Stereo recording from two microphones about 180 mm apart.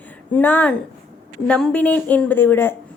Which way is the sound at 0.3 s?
10° left (ahead or behind).